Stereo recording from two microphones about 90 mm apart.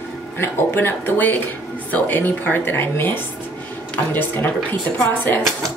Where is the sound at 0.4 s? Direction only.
25° left (ahead or behind).